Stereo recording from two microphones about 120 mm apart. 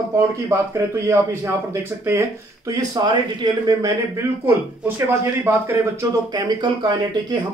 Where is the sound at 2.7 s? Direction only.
30° right (ahead or behind).